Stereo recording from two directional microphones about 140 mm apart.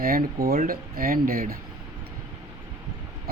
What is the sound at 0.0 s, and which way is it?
Speech, 90° right.